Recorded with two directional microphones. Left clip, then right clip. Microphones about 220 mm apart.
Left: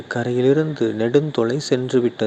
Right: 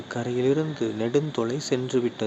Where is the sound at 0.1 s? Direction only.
25° left (ahead or behind).